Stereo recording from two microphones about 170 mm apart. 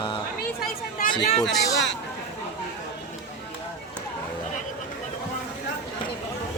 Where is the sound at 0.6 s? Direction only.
55° left (ahead or behind).